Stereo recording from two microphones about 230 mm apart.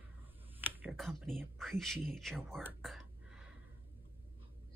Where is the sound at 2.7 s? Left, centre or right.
Centre.